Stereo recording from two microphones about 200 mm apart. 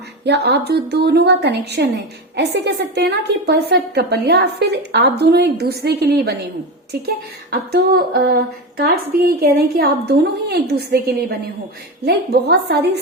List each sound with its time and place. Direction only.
0.3 s a woman's voice: 55° right (ahead or behind)
7.5 s a woman's voice: 50° right (ahead or behind)